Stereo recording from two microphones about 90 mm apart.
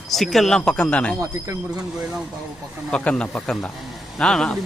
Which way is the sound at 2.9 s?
10° left (ahead or behind).